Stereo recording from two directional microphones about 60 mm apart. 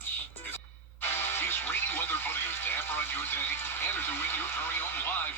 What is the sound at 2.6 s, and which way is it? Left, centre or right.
Radio, left.